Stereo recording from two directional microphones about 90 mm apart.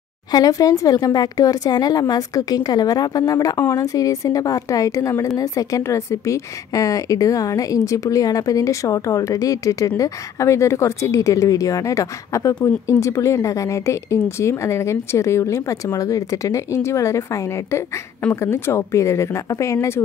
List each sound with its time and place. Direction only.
0.3 s a woman's voice: 45° left (ahead or behind)
18.3 s a woman's voice: 30° left (ahead or behind)